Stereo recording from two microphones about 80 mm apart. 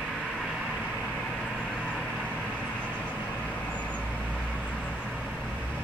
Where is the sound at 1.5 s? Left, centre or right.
Centre.